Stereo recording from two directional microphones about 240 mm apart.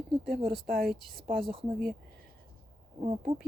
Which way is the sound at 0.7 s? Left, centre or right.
Right.